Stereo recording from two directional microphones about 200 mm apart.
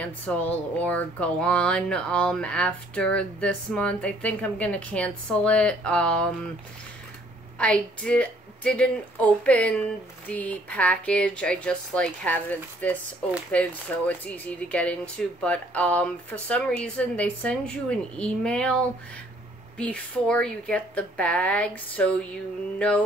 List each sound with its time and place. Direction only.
0.0 s speech: 5° left (ahead or behind)
7.5 s speech: 5° left (ahead or behind)
22.8 s mantra: 5° left (ahead or behind)